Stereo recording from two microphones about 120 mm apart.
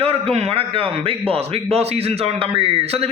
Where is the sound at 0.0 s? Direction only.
55° right (ahead or behind).